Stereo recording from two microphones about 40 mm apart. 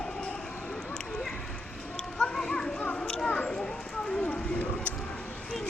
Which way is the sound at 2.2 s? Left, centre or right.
Centre.